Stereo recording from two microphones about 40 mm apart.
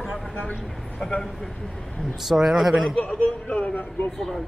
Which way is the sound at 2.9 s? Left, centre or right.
Left.